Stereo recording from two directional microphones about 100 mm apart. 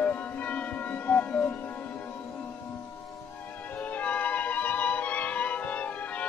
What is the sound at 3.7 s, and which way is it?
Music, 15° left (ahead or behind).